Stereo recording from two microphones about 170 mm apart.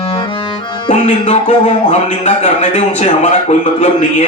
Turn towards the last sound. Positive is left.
turn(degrees=40)  # may be behind; listen again after turning